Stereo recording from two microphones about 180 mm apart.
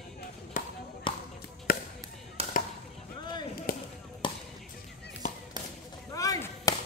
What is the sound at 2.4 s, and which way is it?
Chop, 35° right (ahead or behind).